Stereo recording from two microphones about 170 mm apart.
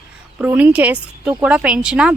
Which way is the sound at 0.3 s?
10° right (ahead or behind).